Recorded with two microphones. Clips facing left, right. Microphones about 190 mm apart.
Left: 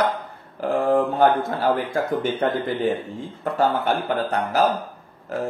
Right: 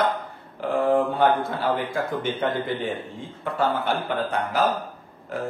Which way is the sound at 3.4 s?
40° left (ahead or behind).